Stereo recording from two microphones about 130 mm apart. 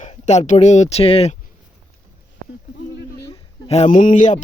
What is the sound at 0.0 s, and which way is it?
Speech, 60° left (ahead or behind).